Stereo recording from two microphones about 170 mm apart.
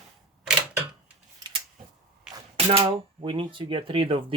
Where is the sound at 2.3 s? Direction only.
30° right (ahead or behind).